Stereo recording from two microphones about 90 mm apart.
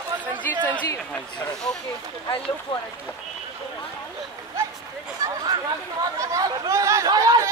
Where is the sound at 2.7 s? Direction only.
60° left (ahead or behind).